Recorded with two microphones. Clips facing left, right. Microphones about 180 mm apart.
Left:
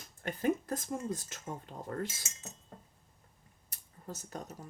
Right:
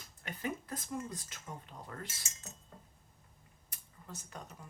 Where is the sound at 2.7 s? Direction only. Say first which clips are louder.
Left 3 dB; 45° left (ahead or behind).